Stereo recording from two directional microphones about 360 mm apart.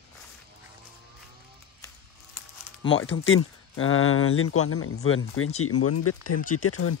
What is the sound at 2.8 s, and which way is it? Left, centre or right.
Speech, left.